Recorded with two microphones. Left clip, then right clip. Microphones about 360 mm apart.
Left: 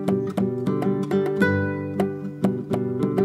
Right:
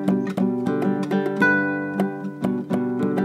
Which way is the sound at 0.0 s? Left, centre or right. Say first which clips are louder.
Right 1 dB; right.